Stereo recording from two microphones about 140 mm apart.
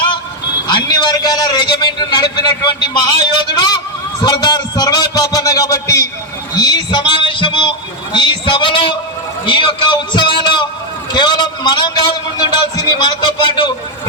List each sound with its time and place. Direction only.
0.7 s a man's voice: 30° left (ahead or behind)